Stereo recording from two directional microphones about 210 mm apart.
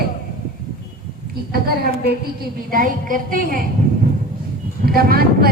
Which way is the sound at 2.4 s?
40° right (ahead or behind).